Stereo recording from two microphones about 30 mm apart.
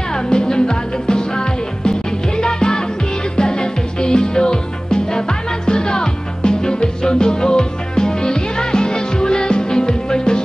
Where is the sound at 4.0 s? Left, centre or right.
Left.